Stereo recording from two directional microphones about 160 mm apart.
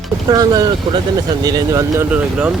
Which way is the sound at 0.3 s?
25° right (ahead or behind).